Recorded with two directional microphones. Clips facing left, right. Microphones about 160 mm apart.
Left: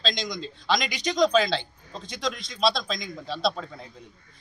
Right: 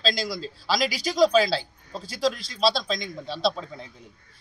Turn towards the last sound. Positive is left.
turn(degrees=0)  # may be behind; listen again after turning